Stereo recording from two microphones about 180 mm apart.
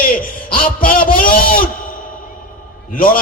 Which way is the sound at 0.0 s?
50° left (ahead or behind).